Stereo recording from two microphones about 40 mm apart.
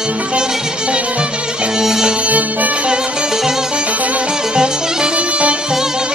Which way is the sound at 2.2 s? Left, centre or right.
Right.